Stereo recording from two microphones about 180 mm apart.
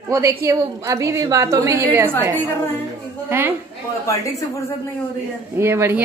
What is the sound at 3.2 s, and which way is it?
Speech, 10° right (ahead or behind).